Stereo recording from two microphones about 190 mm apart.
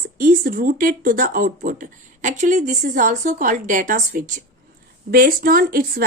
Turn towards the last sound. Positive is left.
turn(degrees=-50)  # may be behind; listen again after turning